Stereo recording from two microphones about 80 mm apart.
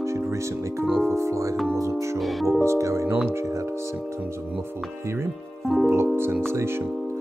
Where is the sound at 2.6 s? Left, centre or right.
Right.